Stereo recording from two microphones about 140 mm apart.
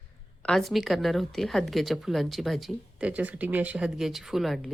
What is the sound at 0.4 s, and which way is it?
A woman's voice, centre (ahead or behind).